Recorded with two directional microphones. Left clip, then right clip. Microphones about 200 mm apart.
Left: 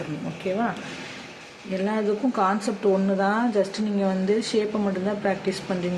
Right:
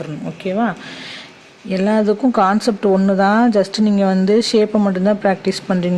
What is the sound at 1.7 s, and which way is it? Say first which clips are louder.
Speech: right 9 dB; 50° right (ahead or behind).